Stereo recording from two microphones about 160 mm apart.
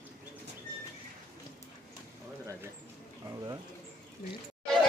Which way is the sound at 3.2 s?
20° right (ahead or behind).